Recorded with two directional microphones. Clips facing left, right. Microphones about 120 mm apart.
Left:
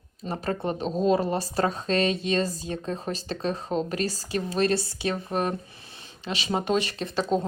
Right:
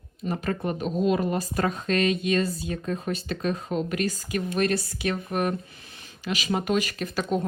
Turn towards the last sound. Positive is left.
turn(degrees=30)  # may be behind; listen again after turning